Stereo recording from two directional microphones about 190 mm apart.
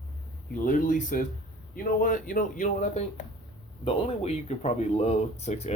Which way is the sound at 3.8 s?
30° left (ahead or behind).